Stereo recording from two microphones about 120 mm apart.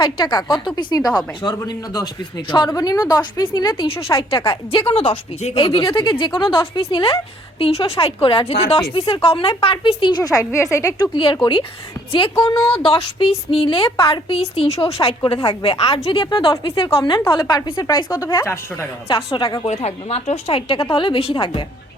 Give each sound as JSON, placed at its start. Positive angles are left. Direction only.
{"t": 0.0, "sound": "a woman's voice", "side_deg": 40}
{"t": 10.9, "sound": "a woman's voice", "side_deg": 40}
{"t": 16.1, "sound": "a woman's voice", "side_deg": 45}
{"t": 19.0, "sound": "speech", "side_deg": 50}
{"t": 19.6, "sound": "a woman's voice", "side_deg": 60}